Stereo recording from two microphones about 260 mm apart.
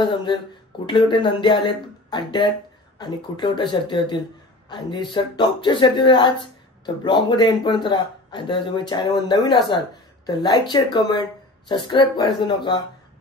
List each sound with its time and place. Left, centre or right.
0.0 s speech: centre